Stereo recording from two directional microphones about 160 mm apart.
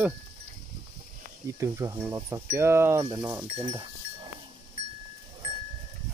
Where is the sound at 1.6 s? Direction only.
20° right (ahead or behind).